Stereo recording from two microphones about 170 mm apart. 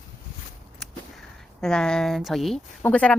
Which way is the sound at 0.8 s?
Centre (ahead or behind).